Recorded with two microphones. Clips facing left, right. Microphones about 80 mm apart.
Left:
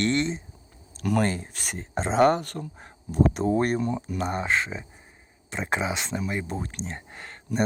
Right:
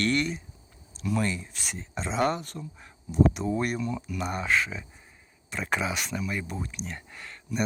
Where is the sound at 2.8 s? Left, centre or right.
Left.